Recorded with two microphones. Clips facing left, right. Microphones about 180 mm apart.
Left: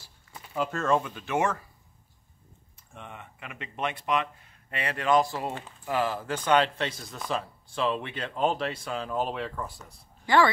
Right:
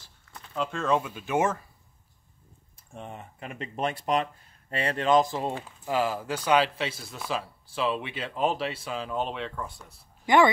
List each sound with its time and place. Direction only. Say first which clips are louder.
0.0 s speech: left 1 dB; 10° left (ahead or behind); by 1.6 s 20° right (ahead or behind)
2.9 s speech: right 4 dB; 35° right (ahead or behind); by 9.9 s centre (ahead or behind)
10.2 s speech: right 2 dB; 20° right (ahead or behind)